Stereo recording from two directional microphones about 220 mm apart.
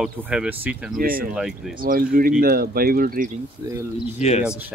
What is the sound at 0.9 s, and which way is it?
Speech, 40° right (ahead or behind).